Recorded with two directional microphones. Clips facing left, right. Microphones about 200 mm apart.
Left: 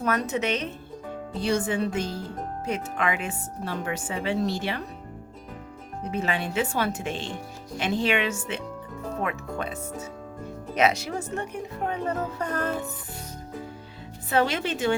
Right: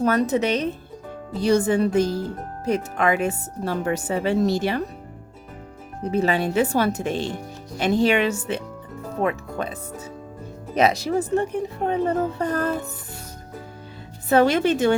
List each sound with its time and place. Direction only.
0.0 s speech: 35° right (ahead or behind)
6.1 s speech: 35° right (ahead or behind)
10.8 s speech: 35° right (ahead or behind)
14.3 s a woman's voice: 45° right (ahead or behind)